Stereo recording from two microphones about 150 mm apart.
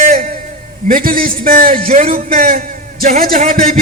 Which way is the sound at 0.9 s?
70° right (ahead or behind).